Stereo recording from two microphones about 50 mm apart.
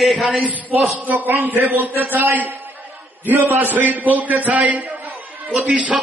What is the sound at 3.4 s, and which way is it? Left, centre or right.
Speech, right.